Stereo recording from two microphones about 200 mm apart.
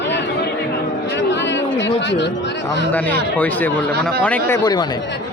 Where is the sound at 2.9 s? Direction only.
10° left (ahead or behind).